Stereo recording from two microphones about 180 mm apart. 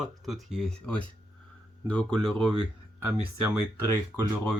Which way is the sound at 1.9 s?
25° right (ahead or behind).